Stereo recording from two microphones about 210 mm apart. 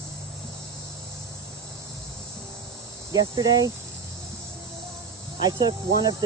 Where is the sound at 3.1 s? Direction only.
20° right (ahead or behind).